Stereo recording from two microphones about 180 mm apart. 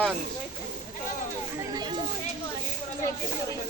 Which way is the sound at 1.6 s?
25° right (ahead or behind).